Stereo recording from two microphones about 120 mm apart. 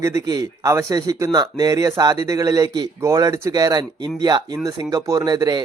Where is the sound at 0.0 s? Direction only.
25° right (ahead or behind).